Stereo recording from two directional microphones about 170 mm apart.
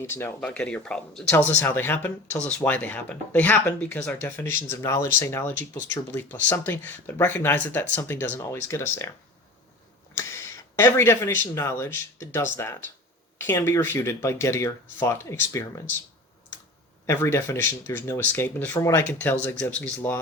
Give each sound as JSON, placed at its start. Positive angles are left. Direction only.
{"t": 0.0, "sound": "speech", "side_deg": 15}
{"t": 10.2, "sound": "a sound", "side_deg": 15}
{"t": 10.8, "sound": "speech", "side_deg": 15}
{"t": 17.1, "sound": "speech", "side_deg": 15}